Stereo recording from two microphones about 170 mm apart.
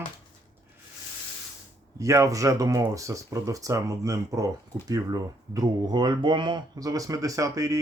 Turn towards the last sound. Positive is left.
turn(degrees=-20)  # may be behind; listen again after turning